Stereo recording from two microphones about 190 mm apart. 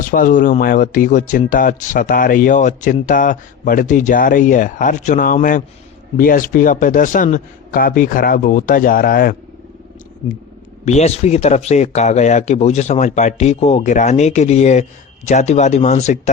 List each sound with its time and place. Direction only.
0.1 s speech: 45° left (ahead or behind)
10.8 s speech: 35° left (ahead or behind)